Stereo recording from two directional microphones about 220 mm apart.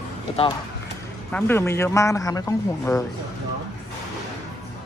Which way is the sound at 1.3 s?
10° left (ahead or behind).